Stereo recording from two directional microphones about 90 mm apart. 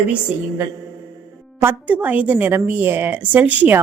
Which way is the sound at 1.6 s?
20° right (ahead or behind).